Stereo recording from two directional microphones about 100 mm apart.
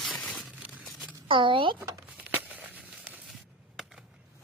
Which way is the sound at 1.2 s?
55° right (ahead or behind).